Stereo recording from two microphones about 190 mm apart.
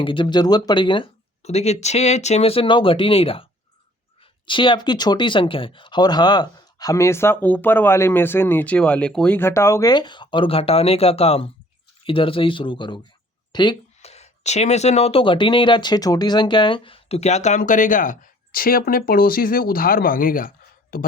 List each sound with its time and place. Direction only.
0.0 s speech: 25° left (ahead or behind)
4.4 s a man's voice: 25° left (ahead or behind); by 21.1 s 50° left (ahead or behind)